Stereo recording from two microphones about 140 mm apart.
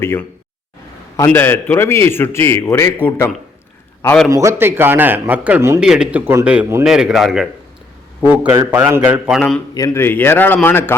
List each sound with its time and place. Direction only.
0.0 s a man's voice: 15° left (ahead or behind)
4.3 s a man's voice: 20° right (ahead or behind)
5.8 s a man's voice: 5° right (ahead or behind)
6.8 s speech: 5° right (ahead or behind)
8.2 s a man's voice: 15° right (ahead or behind)
9.2 s speech: centre (ahead or behind)
9.7 s a man's voice: 20° left (ahead or behind)